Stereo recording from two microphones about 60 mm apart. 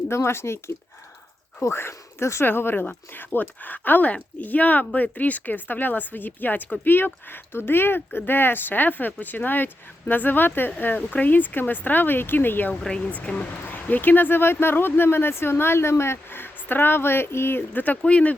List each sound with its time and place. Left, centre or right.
0.1 s speech: left
1.6 s speech: left
12.8 s speech: centre; by 17.6 s left
17.7 s speech: left